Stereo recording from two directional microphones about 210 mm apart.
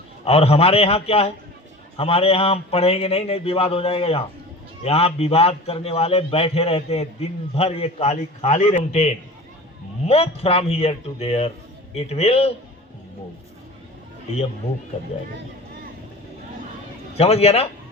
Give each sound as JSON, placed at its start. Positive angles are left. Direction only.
{"t": 0.3, "sound": "a man's voice", "side_deg": 30}
{"t": 17.2, "sound": "a man's voice", "side_deg": 30}